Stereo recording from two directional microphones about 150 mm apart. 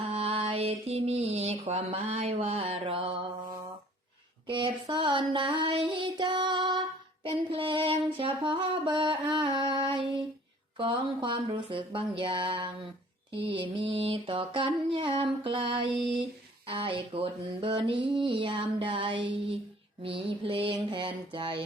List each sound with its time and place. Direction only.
0.0 s mantra: 40° right (ahead or behind)
4.4 s child singing: 35° right (ahead or behind)
7.3 s a sound: 35° right (ahead or behind)